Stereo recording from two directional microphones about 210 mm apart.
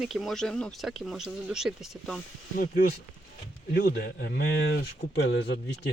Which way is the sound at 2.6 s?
45° left (ahead or behind).